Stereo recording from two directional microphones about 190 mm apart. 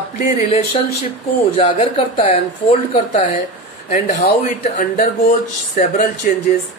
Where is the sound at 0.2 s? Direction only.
35° left (ahead or behind).